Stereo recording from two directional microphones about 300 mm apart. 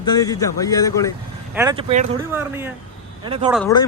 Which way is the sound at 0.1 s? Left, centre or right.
Centre.